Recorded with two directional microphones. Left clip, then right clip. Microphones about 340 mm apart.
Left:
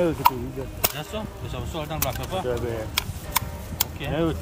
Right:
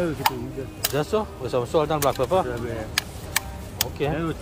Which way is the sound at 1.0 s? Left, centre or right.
Centre.